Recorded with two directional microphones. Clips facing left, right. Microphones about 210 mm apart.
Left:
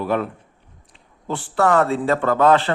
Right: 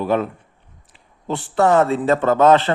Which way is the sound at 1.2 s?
20° right (ahead or behind).